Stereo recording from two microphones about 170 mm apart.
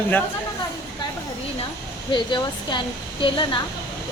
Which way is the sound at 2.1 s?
25° left (ahead or behind).